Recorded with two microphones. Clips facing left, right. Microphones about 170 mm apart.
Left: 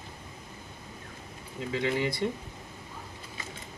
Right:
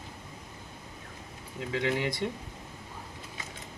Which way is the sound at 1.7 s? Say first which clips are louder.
Left 1 dB; 15° right (ahead or behind).